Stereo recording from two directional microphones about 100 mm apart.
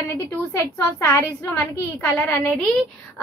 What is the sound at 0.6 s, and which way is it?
A woman's voice, 25° left (ahead or behind).